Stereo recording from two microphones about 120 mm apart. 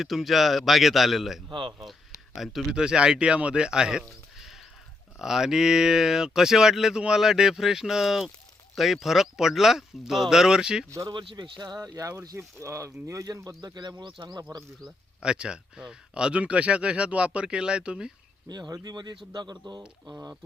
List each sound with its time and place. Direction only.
0.0 s speech: centre (ahead or behind)
1.5 s speech: 40° right (ahead or behind)
1.8 s speech: centre (ahead or behind)
10.8 s speech: 25° right (ahead or behind)
11.1 s speech: 40° right (ahead or behind)
14.8 s speech: 5° right (ahead or behind)
18.4 s speech: 35° right (ahead or behind)